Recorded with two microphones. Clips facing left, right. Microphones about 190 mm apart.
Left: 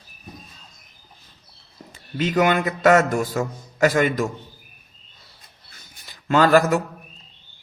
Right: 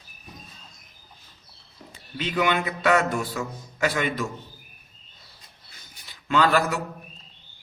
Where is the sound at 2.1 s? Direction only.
45° left (ahead or behind).